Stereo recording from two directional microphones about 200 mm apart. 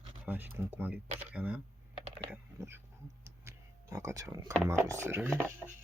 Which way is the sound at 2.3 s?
10° right (ahead or behind).